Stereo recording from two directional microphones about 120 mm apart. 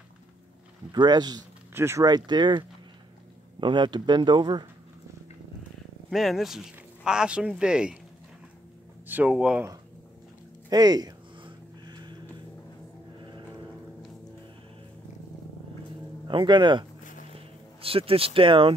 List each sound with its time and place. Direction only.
0.9 s speech: 35° right (ahead or behind)
1.7 s speech: 20° right (ahead or behind)
2.0 s speech: 35° right (ahead or behind)
3.6 s speech: 40° right (ahead or behind)
6.0 s speech: centre (ahead or behind)
9.0 s speech: 15° right (ahead or behind)
10.7 s a sound: 35° right (ahead or behind)
16.3 s speech: 40° right (ahead or behind)
17.8 s speech: 50° right (ahead or behind)